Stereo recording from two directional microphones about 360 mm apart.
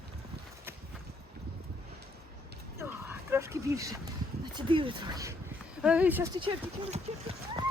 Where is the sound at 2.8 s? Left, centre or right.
Centre.